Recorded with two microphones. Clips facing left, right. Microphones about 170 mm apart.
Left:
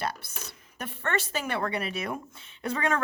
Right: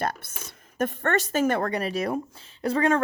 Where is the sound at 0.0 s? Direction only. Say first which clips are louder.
Right 4 dB; 50° right (ahead or behind).